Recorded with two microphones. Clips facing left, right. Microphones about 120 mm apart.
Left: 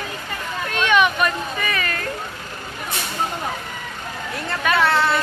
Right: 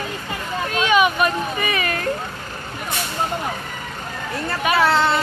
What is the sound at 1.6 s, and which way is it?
Speech, 20° right (ahead or behind).